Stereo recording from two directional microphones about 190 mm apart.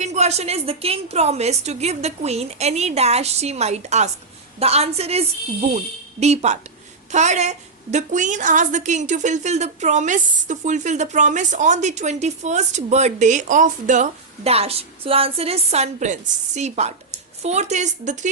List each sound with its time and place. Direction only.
0.0 s a woman's voice: 35° right (ahead or behind)